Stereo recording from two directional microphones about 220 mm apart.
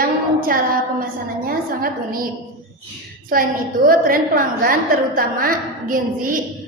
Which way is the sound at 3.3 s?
40° right (ahead or behind).